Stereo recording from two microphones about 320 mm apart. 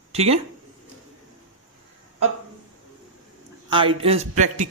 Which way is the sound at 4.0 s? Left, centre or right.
Centre.